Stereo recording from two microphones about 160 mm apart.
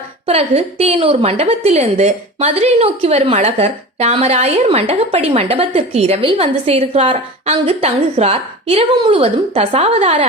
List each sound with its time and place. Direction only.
0.3 s a woman's voice: 40° right (ahead or behind)